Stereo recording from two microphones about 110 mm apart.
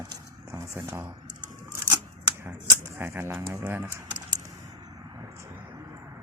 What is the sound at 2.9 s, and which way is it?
Speech, 20° right (ahead or behind).